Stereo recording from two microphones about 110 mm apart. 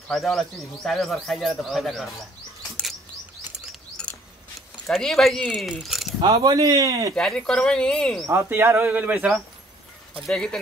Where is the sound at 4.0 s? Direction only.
10° left (ahead or behind).